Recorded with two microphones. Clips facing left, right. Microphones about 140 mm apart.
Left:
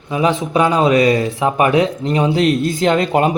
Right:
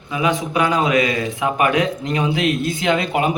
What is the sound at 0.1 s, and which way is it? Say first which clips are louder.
A man's voice: left 4 dB; 35° left (ahead or behind).